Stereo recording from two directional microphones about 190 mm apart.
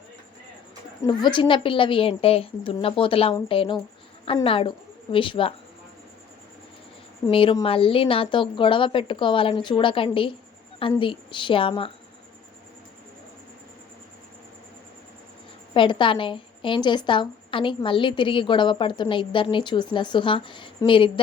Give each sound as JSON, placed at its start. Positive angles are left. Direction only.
{"t": 1.0, "sound": "a woman's voice", "side_deg": 25}
{"t": 7.3, "sound": "a woman's voice", "side_deg": 30}
{"t": 15.7, "sound": "a woman's voice", "side_deg": 25}